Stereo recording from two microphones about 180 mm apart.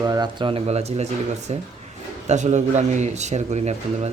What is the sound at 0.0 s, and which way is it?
Speech, 20° right (ahead or behind).